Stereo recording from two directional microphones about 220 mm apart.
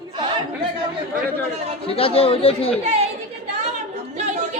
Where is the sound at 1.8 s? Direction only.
25° left (ahead or behind).